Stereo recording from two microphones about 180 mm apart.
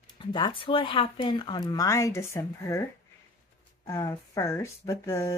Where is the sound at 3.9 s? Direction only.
15° left (ahead or behind).